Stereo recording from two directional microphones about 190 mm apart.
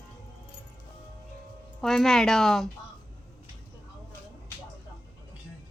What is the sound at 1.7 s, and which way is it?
Speech, centre (ahead or behind).